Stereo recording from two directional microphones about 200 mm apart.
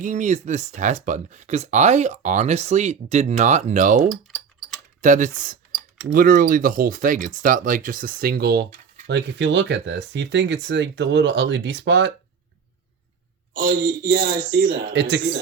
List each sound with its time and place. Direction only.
0.0 s speech: 40° right (ahead or behind)
4.1 s typing: centre (ahead or behind)
4.9 s speech: 40° right (ahead or behind)
9.0 s speech: 65° right (ahead or behind)
13.5 s speech: 50° right (ahead or behind)